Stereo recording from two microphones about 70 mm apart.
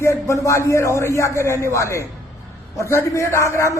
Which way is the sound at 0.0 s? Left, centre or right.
Left.